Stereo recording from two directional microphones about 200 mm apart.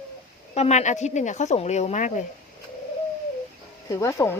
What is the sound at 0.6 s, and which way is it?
Speech, 35° left (ahead or behind).